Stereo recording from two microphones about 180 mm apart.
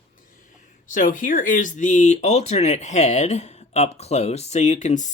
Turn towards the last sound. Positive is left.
turn(degrees=40)  # may be behind; listen again after turning